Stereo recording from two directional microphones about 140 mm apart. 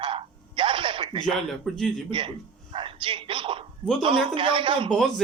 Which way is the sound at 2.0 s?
40° right (ahead or behind).